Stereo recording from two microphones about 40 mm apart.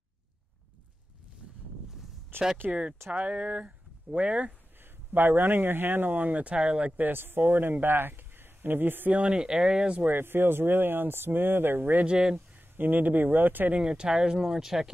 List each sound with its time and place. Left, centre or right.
2.6 s speech: right
5.1 s speech: right
6.3 s speech: right
7.0 s speech: right
9.1 s speech: right
10.0 s speech: right
12.1 s speech: centre
12.4 s speech: right
13.7 s speech: centre